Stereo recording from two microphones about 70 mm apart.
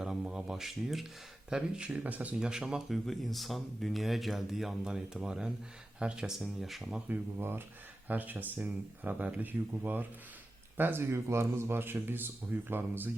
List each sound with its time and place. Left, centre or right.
0.0 s a sound: centre
1.5 s speech: centre
2.4 s speech: centre
3.1 s speech: centre
7.3 s speech: right
11.1 s speech: right